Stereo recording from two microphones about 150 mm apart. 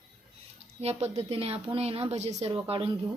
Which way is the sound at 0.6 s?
45° right (ahead or behind).